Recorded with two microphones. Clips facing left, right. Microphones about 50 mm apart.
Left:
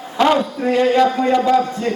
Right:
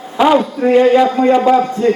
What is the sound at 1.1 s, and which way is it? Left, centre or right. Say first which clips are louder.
Speech: right 4 dB; right.